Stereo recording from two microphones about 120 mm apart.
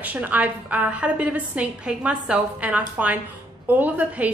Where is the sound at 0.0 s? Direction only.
15° right (ahead or behind).